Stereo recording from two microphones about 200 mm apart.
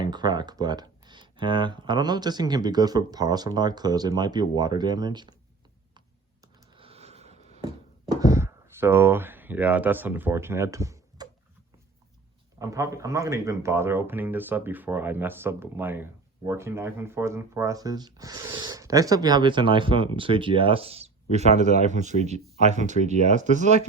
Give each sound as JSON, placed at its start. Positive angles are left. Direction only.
{"t": 0.0, "sound": "speech", "side_deg": -20}
{"t": 6.7, "sound": "a sound", "side_deg": -30}
{"t": 12.5, "sound": "speech", "side_deg": -15}